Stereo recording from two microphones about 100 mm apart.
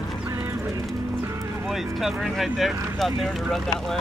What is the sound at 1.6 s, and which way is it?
Speech, centre (ahead or behind).